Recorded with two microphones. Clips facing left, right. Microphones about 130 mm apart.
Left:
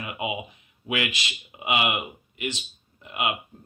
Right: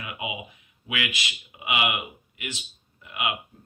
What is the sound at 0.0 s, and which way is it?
Speech, 30° left (ahead or behind).